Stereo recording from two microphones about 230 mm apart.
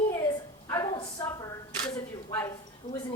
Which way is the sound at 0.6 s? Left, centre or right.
Centre.